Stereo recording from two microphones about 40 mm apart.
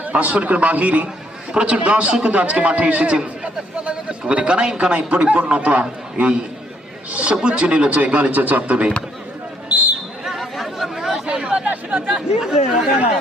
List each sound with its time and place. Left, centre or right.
0.0 s a man's voice: right
10.2 s chatter: centre
11.3 s chatter: right
12.1 s speech: centre